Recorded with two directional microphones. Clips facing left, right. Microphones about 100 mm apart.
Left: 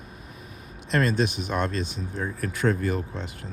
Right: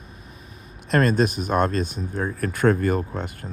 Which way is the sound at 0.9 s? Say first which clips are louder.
Right 4 dB; 50° right (ahead or behind).